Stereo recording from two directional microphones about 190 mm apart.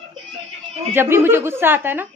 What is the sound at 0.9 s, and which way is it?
A woman's voice, 10° right (ahead or behind).